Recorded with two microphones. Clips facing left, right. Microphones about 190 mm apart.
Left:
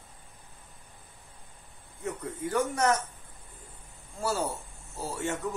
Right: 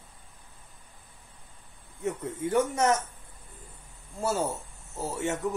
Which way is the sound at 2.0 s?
25° right (ahead or behind).